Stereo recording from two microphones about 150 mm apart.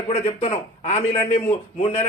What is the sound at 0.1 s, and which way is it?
Speech, 45° left (ahead or behind).